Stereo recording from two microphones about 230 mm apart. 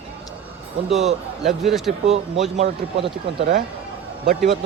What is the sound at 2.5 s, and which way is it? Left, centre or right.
Speech, right.